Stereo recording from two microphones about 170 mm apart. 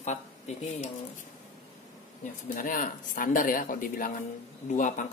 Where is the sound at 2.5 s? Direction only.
50° left (ahead or behind).